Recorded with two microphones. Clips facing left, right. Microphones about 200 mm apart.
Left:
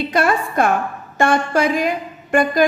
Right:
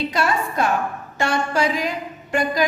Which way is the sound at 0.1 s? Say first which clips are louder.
Left 4 dB; 55° left (ahead or behind).